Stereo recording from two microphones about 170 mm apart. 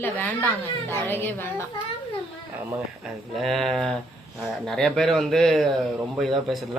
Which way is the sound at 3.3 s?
Centre (ahead or behind).